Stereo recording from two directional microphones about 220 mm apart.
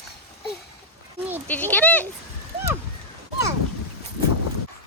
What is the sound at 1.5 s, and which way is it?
Speech, 5° left (ahead or behind).